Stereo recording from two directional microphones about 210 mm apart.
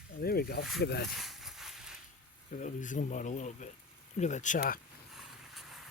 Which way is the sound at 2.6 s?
35° left (ahead or behind).